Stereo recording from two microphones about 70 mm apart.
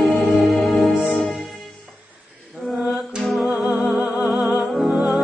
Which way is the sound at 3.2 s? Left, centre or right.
Centre.